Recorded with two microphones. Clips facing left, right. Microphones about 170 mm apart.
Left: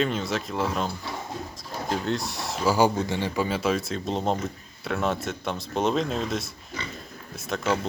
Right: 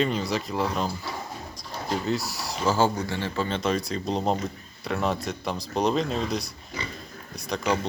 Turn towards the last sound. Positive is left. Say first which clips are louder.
# even
turn(degrees=0)  # may be behind; listen again after turning